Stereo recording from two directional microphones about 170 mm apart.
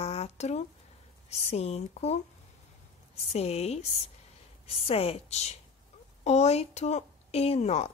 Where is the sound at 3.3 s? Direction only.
40° left (ahead or behind).